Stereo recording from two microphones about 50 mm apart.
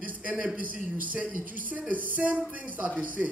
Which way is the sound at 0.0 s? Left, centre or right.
Right.